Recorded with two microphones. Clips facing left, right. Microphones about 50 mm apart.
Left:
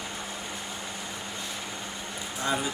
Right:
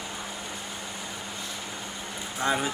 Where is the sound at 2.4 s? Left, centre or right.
Right.